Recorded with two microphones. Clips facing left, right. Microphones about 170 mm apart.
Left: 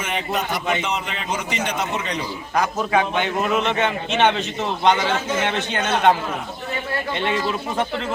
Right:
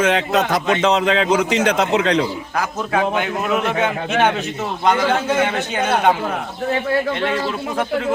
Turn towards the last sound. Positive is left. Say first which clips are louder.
# right 2 dB
turn(degrees=0)  # may be behind; listen again after turning